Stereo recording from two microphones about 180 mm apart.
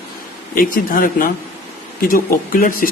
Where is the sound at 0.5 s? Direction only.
50° left (ahead or behind).